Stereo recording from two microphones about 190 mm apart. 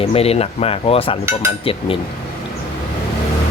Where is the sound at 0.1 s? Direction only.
30° left (ahead or behind).